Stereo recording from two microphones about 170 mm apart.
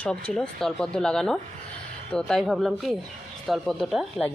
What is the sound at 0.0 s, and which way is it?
Speech, 5° left (ahead or behind).